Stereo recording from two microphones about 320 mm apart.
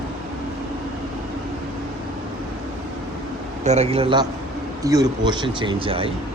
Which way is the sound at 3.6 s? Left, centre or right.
Right.